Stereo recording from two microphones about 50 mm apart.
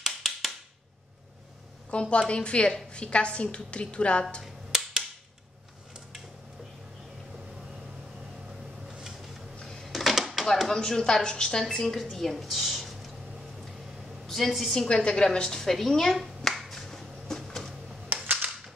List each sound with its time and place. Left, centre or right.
0.0 s a sound: centre
1.9 s a woman's voice: left
4.7 s a sound: centre
9.7 s typewriter: centre
10.7 s a woman's voice: centre
14.2 s a woman's voice: centre
14.9 s a woman's voice: centre
16.4 s finger snapping: centre
18.1 s cap gun: right